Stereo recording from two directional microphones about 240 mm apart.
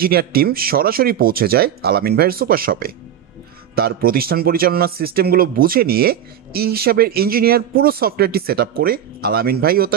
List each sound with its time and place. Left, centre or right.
0.0 s speech: right